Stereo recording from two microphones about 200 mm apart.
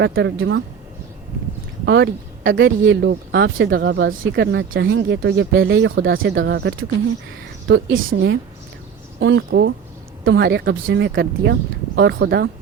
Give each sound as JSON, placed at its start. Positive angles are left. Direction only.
{"t": 0.0, "sound": "speech", "side_deg": -60}
{"t": 1.8, "sound": "speech", "side_deg": -60}
{"t": 8.0, "sound": "a woman's voice", "side_deg": -70}